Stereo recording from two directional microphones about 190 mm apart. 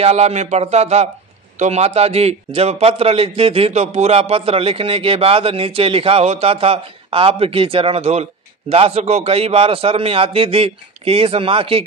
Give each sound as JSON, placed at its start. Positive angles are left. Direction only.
{"t": 0.0, "sound": "a man's voice", "side_deg": -35}